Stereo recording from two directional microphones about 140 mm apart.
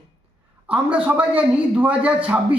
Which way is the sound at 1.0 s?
10° right (ahead or behind).